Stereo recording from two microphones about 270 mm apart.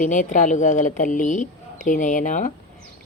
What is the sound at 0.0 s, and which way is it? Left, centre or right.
Speech, left.